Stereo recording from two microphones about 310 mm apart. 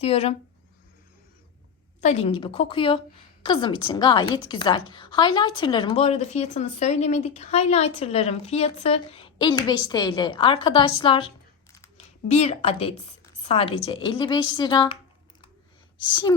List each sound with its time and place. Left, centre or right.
0.0 s speech: centre
2.0 s a woman's voice: left